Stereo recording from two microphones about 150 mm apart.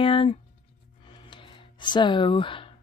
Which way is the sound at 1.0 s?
35° left (ahead or behind).